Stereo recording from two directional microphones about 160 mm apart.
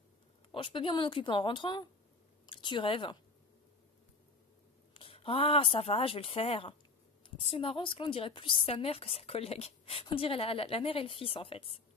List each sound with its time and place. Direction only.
0.5 s a woman's voice: 30° left (ahead or behind)
4.9 s a woman's voice: 35° left (ahead or behind)